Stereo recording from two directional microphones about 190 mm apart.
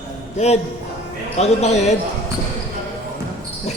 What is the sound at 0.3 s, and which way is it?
Speech, 35° left (ahead or behind).